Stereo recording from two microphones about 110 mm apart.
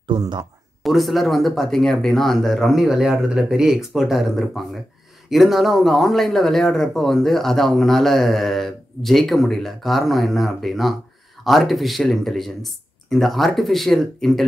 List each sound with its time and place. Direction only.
0.2 s speech: 35° right (ahead or behind)
0.8 s speech: centre (ahead or behind)